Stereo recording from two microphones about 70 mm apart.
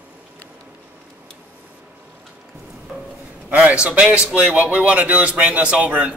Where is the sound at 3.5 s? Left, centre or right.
Centre.